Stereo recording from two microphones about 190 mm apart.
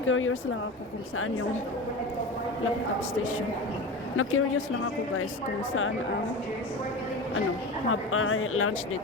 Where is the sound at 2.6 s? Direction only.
90° left.